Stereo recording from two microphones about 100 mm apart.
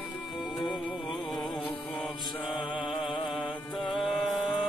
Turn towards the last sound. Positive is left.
turn(degrees=0)  # may be behind; listen again after turning